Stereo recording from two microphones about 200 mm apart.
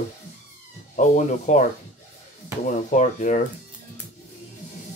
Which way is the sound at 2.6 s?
40° left (ahead or behind).